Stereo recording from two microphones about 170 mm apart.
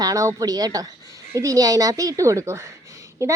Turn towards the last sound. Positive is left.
turn(degrees=-15)  # may be behind; listen again after turning